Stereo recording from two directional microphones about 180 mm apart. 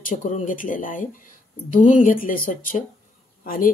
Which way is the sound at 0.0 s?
45° left (ahead or behind).